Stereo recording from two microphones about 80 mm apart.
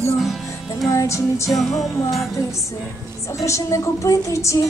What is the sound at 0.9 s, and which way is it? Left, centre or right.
Music, left.